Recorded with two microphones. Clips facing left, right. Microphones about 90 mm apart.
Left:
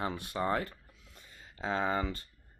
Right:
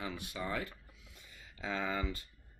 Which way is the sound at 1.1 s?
35° left (ahead or behind).